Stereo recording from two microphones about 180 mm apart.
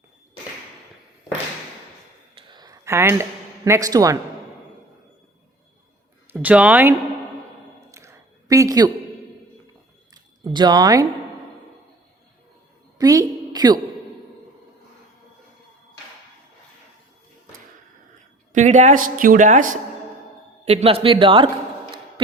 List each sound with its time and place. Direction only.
2.5 s a sound: 20° right (ahead or behind)
6.3 s speech: 5° right (ahead or behind)
7.9 s a sound: 15° right (ahead or behind)
10.4 s speech: 20° right (ahead or behind)
13.0 s a woman's voice: 20° right (ahead or behind)
18.5 s a man's voice: 40° right (ahead or behind)
20.7 s a man's voice: 35° right (ahead or behind)